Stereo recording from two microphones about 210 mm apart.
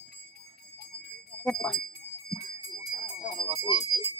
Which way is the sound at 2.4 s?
45° left (ahead or behind).